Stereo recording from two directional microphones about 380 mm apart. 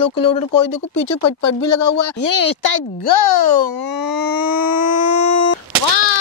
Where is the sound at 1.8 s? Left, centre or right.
Left.